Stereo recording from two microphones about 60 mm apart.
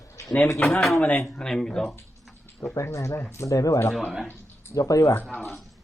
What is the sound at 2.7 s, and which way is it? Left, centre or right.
Speech, left.